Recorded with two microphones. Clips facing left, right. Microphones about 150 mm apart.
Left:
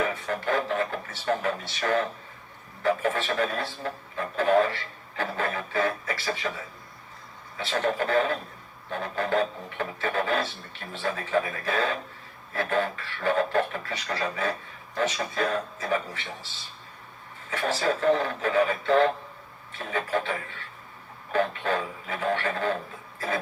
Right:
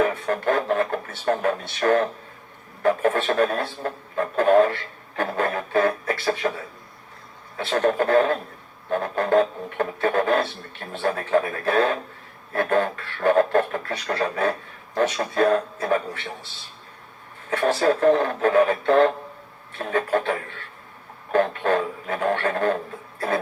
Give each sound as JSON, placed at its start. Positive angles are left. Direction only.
{"t": 0.0, "sound": "speech", "side_deg": -50}
{"t": 7.5, "sound": "speech", "side_deg": -50}
{"t": 17.5, "sound": "speech", "side_deg": -55}
{"t": 21.3, "sound": "speech", "side_deg": -50}